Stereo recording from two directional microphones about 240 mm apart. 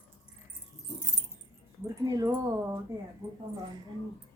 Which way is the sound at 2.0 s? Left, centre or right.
Centre.